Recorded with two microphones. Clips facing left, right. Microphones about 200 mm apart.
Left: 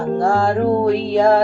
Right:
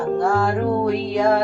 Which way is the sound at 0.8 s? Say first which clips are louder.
Left 4 dB; 30° left (ahead or behind).